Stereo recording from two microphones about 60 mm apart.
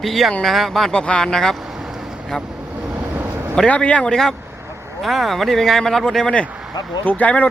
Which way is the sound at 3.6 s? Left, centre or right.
Left.